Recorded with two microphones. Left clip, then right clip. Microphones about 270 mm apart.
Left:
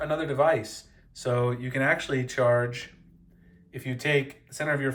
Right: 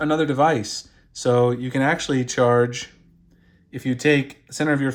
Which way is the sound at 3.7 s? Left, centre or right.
Right.